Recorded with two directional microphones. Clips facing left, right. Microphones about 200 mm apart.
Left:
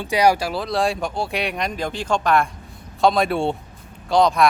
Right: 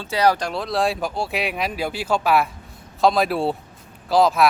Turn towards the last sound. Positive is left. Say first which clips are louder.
# even
turn(degrees=-5)  # may be behind; listen again after turning